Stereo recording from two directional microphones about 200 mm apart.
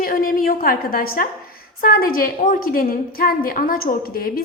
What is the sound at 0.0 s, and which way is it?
A woman's voice, 45° left (ahead or behind).